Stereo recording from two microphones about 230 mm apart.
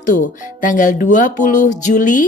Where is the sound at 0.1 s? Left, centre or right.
Left.